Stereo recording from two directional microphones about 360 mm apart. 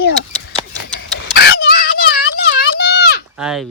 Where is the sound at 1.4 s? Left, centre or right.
Left.